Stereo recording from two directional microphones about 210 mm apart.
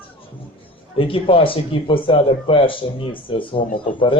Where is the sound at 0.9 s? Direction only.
25° left (ahead or behind).